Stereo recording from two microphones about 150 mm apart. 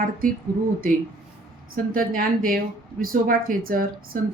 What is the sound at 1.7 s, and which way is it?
Speech, 70° right (ahead or behind).